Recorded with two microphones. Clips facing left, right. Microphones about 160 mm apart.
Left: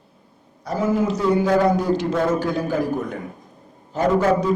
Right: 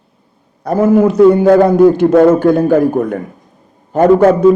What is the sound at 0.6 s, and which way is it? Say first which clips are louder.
A man's voice: right 11 dB; 55° right (ahead or behind).